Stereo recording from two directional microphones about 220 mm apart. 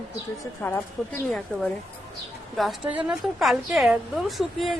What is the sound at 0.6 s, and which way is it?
Speech, 10° left (ahead or behind).